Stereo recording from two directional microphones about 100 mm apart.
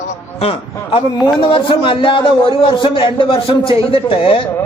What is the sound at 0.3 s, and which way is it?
Speech, 80° left.